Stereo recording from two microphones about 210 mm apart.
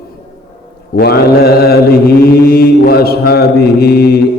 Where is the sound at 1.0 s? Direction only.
50° left (ahead or behind).